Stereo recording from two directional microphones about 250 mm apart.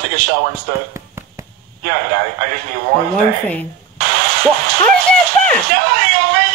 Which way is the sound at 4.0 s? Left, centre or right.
Right.